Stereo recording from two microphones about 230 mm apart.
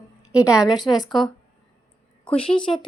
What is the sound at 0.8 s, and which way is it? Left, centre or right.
Speech, centre.